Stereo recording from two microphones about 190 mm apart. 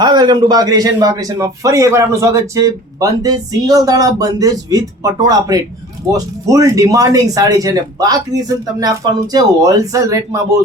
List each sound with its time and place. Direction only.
0.0 s a man's voice: 20° right (ahead or behind)